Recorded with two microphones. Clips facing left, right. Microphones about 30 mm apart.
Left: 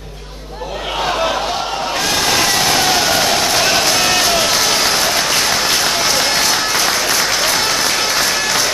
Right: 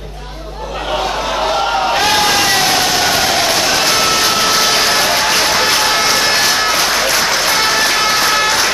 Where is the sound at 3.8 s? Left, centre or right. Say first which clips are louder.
Right 1 dB; centre.